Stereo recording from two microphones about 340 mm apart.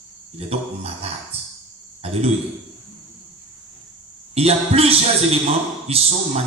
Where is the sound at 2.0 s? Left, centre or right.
Centre.